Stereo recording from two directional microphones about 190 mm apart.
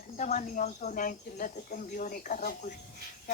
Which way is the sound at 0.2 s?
40° left (ahead or behind).